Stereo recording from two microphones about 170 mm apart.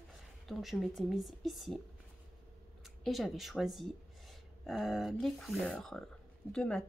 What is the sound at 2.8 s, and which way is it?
Speech, centre (ahead or behind).